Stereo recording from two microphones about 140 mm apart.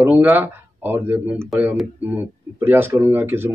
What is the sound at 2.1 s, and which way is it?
Speech, 15° right (ahead or behind).